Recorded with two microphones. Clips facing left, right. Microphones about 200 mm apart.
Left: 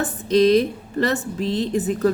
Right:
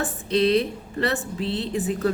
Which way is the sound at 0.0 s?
40° left (ahead or behind).